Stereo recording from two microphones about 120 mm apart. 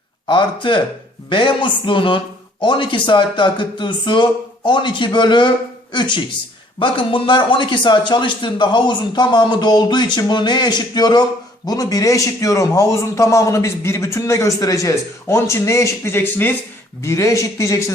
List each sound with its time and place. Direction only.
0.3 s a man's voice: 45° left (ahead or behind); by 17.9 s 25° left (ahead or behind)